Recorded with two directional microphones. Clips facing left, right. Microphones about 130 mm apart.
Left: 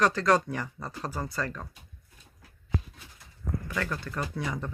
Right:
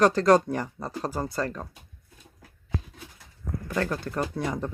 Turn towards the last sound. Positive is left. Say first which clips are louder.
# right 4 dB
turn(degrees=-35)  # may be behind; listen again after turning